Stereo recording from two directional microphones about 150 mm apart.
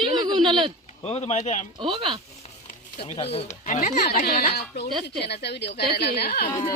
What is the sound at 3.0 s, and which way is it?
Speech, 40° left (ahead or behind).